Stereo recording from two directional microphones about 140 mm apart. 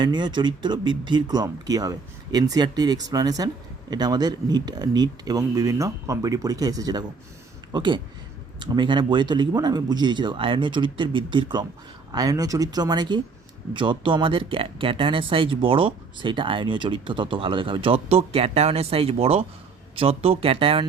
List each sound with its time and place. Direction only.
0.0 s speech: 35° right (ahead or behind)